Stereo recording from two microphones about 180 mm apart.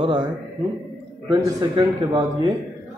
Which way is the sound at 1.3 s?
20° right (ahead or behind).